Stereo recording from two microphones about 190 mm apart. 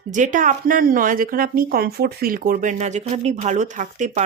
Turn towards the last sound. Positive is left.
turn(degrees=-40)  # may be behind; listen again after turning